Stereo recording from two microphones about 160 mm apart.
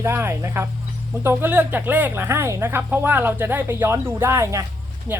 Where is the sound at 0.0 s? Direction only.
15° right (ahead or behind).